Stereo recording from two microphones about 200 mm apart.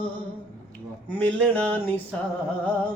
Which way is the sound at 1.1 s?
5° left (ahead or behind).